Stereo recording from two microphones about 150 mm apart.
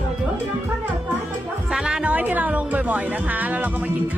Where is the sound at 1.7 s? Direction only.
5° right (ahead or behind).